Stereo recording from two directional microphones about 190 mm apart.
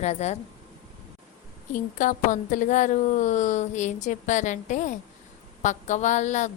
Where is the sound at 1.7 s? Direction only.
40° left (ahead or behind).